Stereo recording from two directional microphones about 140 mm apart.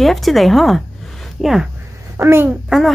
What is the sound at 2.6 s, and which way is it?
Speech, centre (ahead or behind).